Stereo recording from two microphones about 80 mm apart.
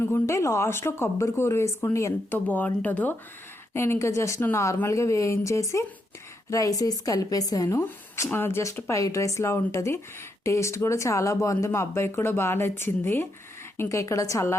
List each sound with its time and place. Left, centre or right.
0.0 s speech: left
2.3 s speech: centre
3.8 s a woman's voice: left
7.9 s speech: left